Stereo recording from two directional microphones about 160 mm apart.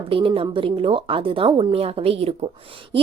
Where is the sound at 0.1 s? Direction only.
35° right (ahead or behind).